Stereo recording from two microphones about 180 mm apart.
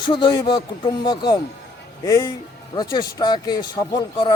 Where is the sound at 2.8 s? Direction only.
25° left (ahead or behind).